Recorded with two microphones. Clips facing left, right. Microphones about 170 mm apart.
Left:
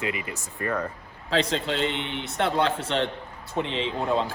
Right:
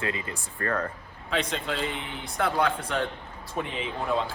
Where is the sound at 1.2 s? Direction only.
30° left (ahead or behind).